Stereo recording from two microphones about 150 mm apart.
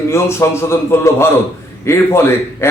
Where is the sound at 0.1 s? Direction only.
15° left (ahead or behind).